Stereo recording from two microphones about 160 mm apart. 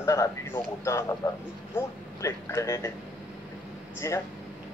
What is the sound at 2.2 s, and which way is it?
Speech, 20° left (ahead or behind).